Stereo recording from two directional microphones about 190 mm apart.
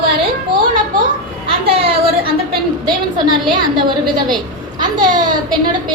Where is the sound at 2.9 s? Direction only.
25° right (ahead or behind).